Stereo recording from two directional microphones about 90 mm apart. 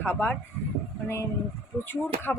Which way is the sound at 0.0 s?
20° left (ahead or behind).